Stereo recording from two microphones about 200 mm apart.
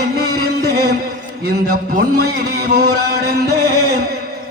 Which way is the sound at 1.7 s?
45° right (ahead or behind).